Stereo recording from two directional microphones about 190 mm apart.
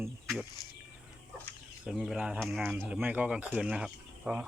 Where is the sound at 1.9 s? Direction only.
Centre (ahead or behind).